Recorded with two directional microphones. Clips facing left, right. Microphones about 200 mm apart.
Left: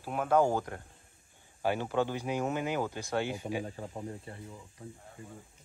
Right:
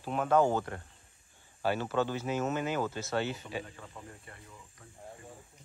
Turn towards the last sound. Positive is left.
turn(degrees=30)  # may be behind; listen again after turning